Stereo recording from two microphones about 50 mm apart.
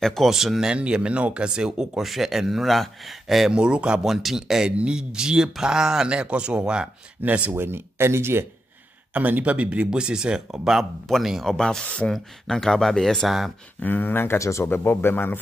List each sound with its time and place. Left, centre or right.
0.0 s speech: centre
0.3 s speech: centre
0.7 s speech: centre
3.5 s speech: centre
4.0 s speech: centre
6.0 s speech: right
7.2 s speech: right
7.5 s speech: right
9.1 s speech: right
9.8 s speech: centre
11.4 s speech: centre
13.7 s speech: left
14.4 s speech: left
14.7 s speech: left